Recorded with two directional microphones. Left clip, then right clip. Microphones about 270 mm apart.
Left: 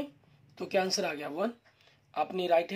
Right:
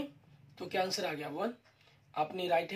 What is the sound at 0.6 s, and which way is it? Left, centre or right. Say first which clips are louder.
Speech: left 4 dB; left.